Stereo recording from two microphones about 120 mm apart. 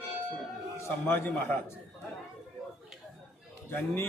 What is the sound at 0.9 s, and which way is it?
Speech, 20° left (ahead or behind).